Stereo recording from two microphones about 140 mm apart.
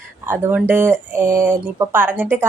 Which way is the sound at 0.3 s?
15° right (ahead or behind).